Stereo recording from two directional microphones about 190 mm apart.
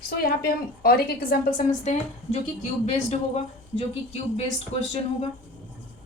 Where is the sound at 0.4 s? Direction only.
50° left (ahead or behind).